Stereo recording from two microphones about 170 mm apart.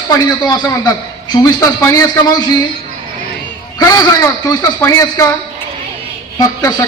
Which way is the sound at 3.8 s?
20° left (ahead or behind).